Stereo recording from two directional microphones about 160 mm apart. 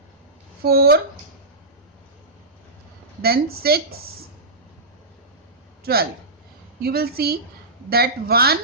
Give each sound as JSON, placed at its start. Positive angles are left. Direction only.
{"t": 0.6, "sound": "a woman's voice", "side_deg": -75}
{"t": 3.2, "sound": "a woman's voice", "side_deg": -70}
{"t": 5.8, "sound": "a woman's voice", "side_deg": -75}